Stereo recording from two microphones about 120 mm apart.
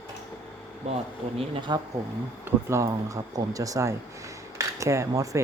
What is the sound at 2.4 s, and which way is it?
Speech, 25° right (ahead or behind).